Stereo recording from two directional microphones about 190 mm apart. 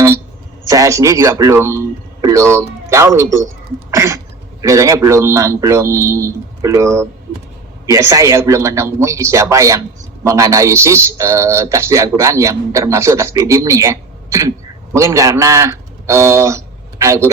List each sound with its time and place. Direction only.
0.7 s a man's voice: 15° right (ahead or behind)